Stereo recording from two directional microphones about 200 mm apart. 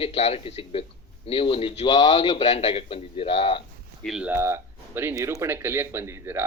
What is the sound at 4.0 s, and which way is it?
Speech, 5° right (ahead or behind).